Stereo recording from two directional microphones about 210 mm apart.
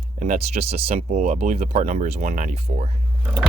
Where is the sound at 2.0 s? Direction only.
50° right (ahead or behind).